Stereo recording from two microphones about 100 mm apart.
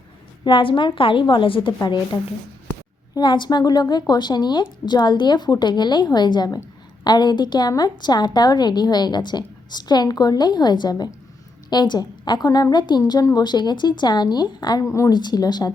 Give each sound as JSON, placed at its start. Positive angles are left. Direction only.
{"t": 0.4, "sound": "a woman's voice", "side_deg": 55}
{"t": 3.2, "sound": "a woman's voice", "side_deg": 50}
{"t": 14.8, "sound": "speech", "side_deg": 30}
{"t": 15.1, "sound": "a woman's voice", "side_deg": 45}